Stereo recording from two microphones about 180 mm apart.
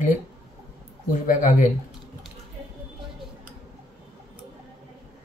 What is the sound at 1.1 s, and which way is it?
Speech, 50° left (ahead or behind).